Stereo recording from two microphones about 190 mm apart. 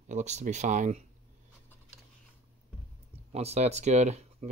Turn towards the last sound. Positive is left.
turn(degrees=-35)  # may be behind; listen again after turning